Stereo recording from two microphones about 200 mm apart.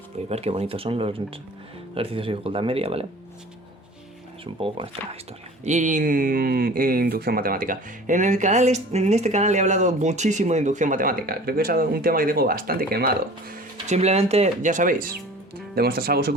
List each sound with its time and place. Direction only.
0.3 s speech: 30° right (ahead or behind)
4.8 s speech: 25° right (ahead or behind)
5.6 s speech: 35° right (ahead or behind)
13.5 s speech: 35° right (ahead or behind); by 16.3 s 50° right (ahead or behind)